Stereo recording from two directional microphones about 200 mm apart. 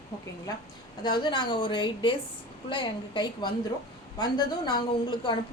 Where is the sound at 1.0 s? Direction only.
20° left (ahead or behind).